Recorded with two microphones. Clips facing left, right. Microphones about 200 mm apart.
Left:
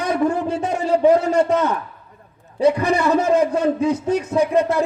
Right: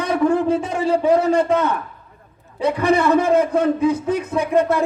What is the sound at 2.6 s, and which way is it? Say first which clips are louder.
A man's voice: even; 55° right (ahead or behind).